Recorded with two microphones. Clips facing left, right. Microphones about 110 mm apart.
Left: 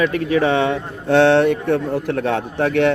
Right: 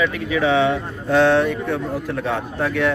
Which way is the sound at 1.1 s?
65° left (ahead or behind).